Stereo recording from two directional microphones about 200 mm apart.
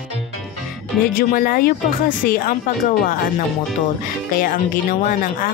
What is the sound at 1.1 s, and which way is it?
Speech, 45° left (ahead or behind).